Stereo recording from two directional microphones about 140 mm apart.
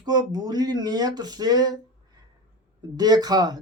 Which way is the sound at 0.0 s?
30° right (ahead or behind).